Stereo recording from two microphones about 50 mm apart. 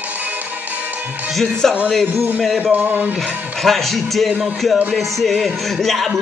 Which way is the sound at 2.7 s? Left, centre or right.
Right.